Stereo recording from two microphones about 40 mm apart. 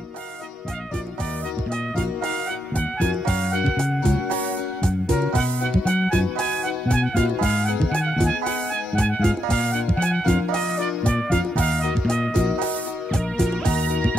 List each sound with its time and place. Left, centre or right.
3.0 s music: centre
8.5 s music: left; by 13.6 s centre
13.7 s music: left